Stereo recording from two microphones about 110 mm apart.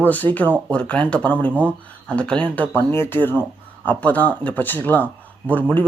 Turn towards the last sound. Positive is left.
turn(degrees=15)  # may be behind; listen again after turning